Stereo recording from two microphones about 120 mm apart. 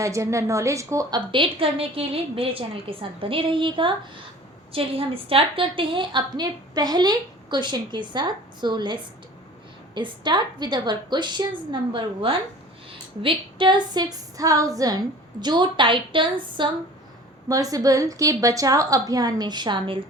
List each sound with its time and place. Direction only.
0.0 s a woman's voice: 25° right (ahead or behind)
1.3 s a woman's voice: 45° right (ahead or behind)
17.5 s a woman's voice: 30° right (ahead or behind)